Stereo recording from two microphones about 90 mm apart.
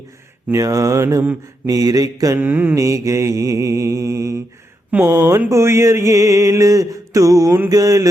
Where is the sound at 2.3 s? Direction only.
20° right (ahead or behind).